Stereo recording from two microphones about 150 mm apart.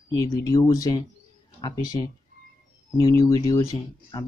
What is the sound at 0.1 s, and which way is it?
Speech, 25° left (ahead or behind).